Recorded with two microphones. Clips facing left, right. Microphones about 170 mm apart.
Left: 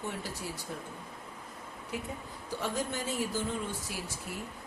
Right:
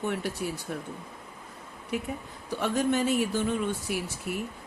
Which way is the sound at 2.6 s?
70° right (ahead or behind).